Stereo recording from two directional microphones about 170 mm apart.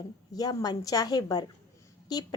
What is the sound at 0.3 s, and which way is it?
A woman's voice, 20° left (ahead or behind).